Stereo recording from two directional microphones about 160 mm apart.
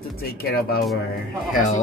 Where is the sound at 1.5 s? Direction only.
50° left (ahead or behind).